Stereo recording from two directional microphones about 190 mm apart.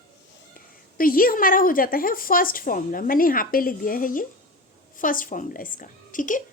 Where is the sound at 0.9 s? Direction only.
50° left (ahead or behind).